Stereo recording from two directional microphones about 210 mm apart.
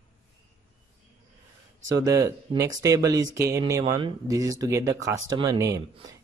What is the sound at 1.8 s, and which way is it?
Speech, 15° right (ahead or behind).